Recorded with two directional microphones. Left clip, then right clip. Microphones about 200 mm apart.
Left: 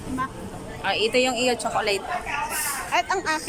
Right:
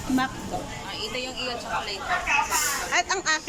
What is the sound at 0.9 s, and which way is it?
Speech, 60° left (ahead or behind).